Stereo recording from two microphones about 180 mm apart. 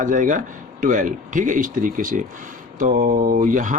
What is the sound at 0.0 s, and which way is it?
Speech, 45° right (ahead or behind).